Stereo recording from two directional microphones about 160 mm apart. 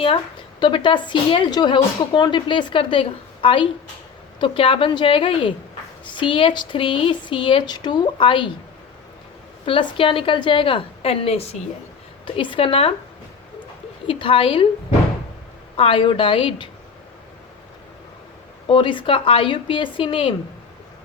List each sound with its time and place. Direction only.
0.6 s a woman's voice: 30° left (ahead or behind)
9.6 s speech: 35° left (ahead or behind)
14.1 s speech: 35° left (ahead or behind)
18.7 s speech: 30° left (ahead or behind)